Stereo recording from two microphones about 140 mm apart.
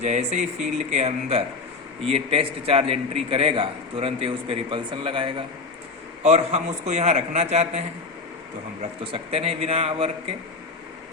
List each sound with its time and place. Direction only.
0.0 s a sound: 55° right (ahead or behind)
0.9 s a man's voice: 50° right (ahead or behind)
6.2 s a man's voice: 50° right (ahead or behind)